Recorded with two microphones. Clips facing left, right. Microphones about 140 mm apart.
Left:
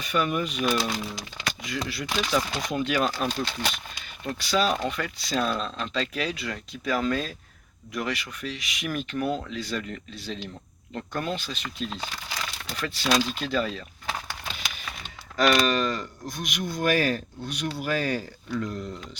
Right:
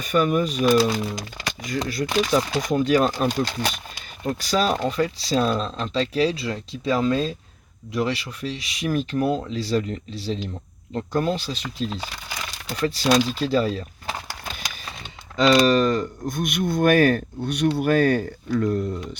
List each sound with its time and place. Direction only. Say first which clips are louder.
0.0 s speech: right 6 dB; 45° right (ahead or behind)
12.5 s crumpling: right 13 dB; 40° right (ahead or behind)
13.3 s a sound: right 6 dB; 35° right (ahead or behind)
15.4 s speech: right 6 dB; 30° right (ahead or behind); by 18.8 s 55° right (ahead or behind)